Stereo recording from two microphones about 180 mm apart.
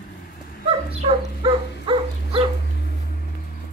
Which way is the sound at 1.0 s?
30° right (ahead or behind).